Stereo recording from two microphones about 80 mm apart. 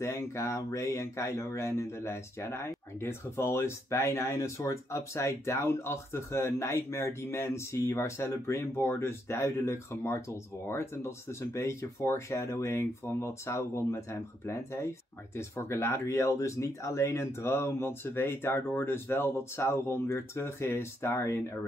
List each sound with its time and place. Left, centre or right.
0.0 s speech: left